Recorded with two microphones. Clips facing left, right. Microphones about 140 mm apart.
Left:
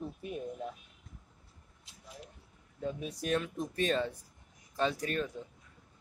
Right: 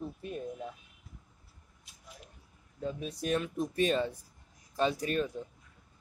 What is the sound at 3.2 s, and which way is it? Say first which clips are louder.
Speech: right 2 dB; 5° right (ahead or behind).